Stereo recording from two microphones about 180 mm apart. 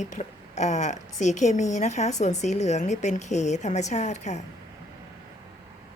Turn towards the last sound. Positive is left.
turn(degrees=40)  # may be behind; listen again after turning